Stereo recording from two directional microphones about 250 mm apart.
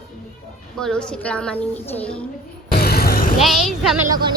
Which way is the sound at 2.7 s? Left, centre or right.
Left.